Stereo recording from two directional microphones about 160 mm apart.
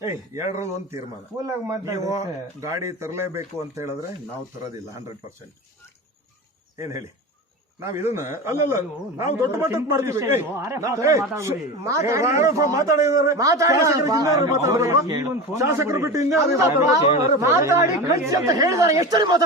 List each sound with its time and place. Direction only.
0.0 s a man's voice: 20° right (ahead or behind)
6.7 s a man's voice: 20° right (ahead or behind)